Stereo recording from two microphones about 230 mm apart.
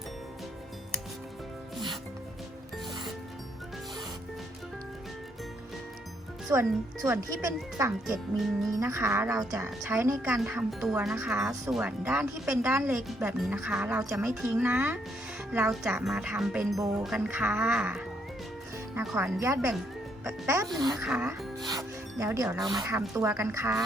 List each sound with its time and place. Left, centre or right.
6.5 s speech: centre
21.0 s speech: centre
21.6 s music: centre
22.6 s speech: centre